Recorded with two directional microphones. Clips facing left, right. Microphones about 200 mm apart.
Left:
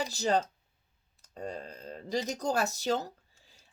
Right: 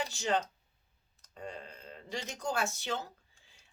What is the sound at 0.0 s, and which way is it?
Speech, 35° left (ahead or behind).